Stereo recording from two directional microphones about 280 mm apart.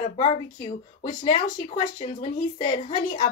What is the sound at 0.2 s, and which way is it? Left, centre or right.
A woman's voice, left.